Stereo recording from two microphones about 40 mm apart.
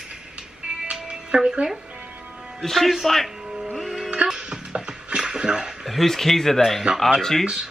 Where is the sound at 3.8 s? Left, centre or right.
Centre.